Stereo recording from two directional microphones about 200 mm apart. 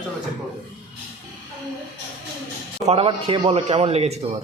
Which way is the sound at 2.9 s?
30° right (ahead or behind).